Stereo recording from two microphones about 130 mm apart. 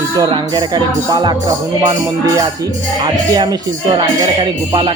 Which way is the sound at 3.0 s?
30° right (ahead or behind).